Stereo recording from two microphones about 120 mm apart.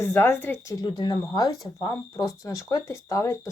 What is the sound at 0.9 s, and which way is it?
Speech, 40° left (ahead or behind).